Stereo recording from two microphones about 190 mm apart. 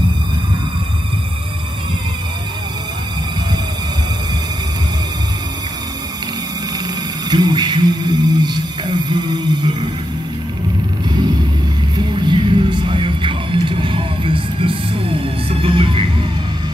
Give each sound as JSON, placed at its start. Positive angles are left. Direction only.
{"t": 7.2, "sound": "speech", "side_deg": -25}
{"t": 12.0, "sound": "music", "side_deg": -25}